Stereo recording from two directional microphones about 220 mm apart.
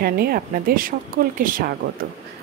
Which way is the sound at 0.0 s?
45° right (ahead or behind).